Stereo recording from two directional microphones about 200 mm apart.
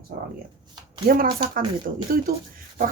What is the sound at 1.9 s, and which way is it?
Speech, 45° right (ahead or behind).